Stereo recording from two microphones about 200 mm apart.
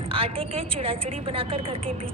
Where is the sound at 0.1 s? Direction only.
30° right (ahead or behind).